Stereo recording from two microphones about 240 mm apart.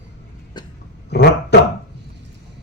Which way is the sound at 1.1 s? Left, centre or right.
Left.